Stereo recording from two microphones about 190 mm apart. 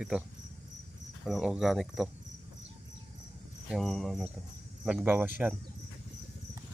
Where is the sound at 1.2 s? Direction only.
Centre (ahead or behind).